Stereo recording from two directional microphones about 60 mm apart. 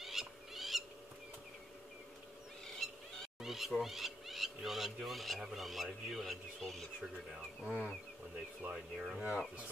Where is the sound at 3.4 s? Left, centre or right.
Centre.